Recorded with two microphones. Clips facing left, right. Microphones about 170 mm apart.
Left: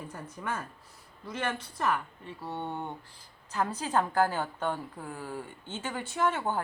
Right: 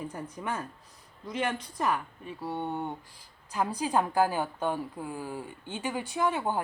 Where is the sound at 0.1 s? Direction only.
15° right (ahead or behind).